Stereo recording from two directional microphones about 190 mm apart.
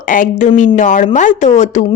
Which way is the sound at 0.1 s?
45° left (ahead or behind).